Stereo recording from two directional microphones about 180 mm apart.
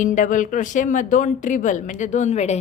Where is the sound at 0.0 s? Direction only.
45° left (ahead or behind).